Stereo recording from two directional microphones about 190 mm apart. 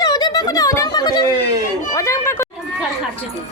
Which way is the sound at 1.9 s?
15° left (ahead or behind).